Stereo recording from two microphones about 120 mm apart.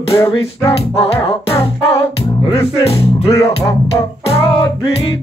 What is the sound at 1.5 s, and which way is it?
Music, 50° left (ahead or behind).